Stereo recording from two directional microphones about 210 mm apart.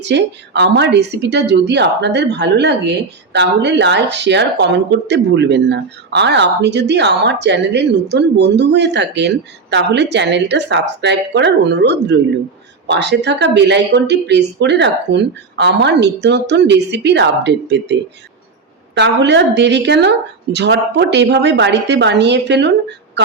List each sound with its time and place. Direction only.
0.0 s a woman's voice: 55° right (ahead or behind)
18.9 s speech: 55° right (ahead or behind)